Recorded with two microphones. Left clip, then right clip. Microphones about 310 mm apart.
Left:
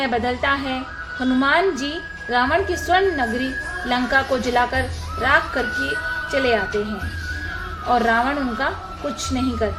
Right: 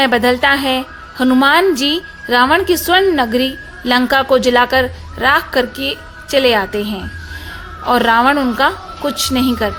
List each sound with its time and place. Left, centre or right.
0.0 s a woman's voice: right
7.9 s a woman's voice: right